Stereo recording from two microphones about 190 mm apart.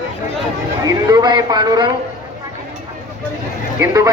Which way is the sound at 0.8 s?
20° right (ahead or behind).